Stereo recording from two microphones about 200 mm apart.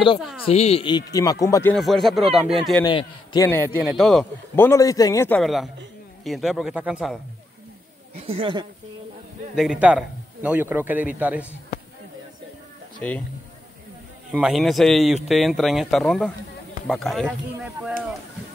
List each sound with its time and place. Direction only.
0.5 s speech: 30° left (ahead or behind); by 1.8 s 15° left (ahead or behind)
1.8 s speech: centre (ahead or behind)
2.8 s speech: 20° left (ahead or behind)
3.4 s a man's voice: 10° left (ahead or behind)
3.7 s speech: 5° right (ahead or behind)
4.6 s a man's voice: 15° left (ahead or behind)
5.4 s speech: centre (ahead or behind)
8.2 s speech: 30° right (ahead or behind)
9.6 s a man's voice: 5° right (ahead or behind)
13.0 s a man's voice: 5° left (ahead or behind)
14.3 s speech: 5° right (ahead or behind)